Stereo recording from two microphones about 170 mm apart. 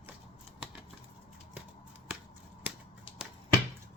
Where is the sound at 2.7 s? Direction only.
10° right (ahead or behind).